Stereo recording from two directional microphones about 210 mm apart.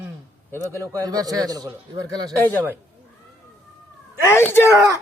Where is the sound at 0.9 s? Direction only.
15° right (ahead or behind).